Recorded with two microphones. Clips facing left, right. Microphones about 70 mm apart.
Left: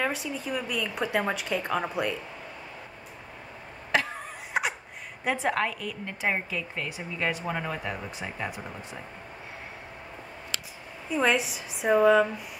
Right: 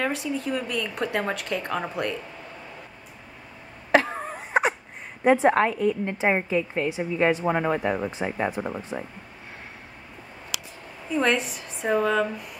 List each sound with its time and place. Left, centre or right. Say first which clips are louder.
0.0 s speech: right 3 dB; centre
3.9 s a sound: right 7 dB; right
5.2 s speech: right 8 dB; right
11.1 s speech: right 2 dB; centre